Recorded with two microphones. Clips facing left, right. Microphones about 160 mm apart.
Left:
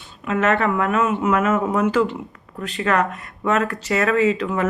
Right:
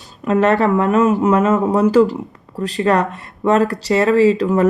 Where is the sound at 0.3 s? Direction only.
35° right (ahead or behind).